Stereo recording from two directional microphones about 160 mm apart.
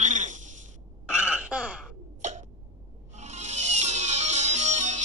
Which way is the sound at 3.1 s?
45° right (ahead or behind).